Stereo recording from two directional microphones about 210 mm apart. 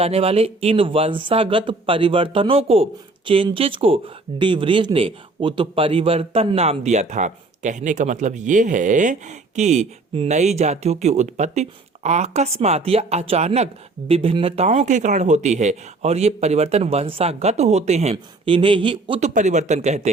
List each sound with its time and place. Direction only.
0.0 s speech: 30° right (ahead or behind)
19.3 s speech: 35° right (ahead or behind)